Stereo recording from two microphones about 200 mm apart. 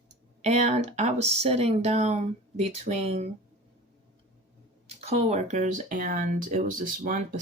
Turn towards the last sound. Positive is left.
turn(degrees=-40)  # may be behind; listen again after turning